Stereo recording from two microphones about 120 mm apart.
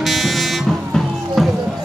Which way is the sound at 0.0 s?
Centre (ahead or behind).